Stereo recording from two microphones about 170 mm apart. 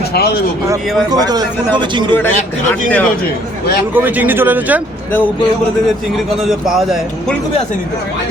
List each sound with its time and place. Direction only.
0.1 s speech: 70° left (ahead or behind)
1.1 s a man's voice: 25° right (ahead or behind)
2.1 s speech: 10° left (ahead or behind)
3.9 s speech: 10° right (ahead or behind)
6.4 s speech: centre (ahead or behind)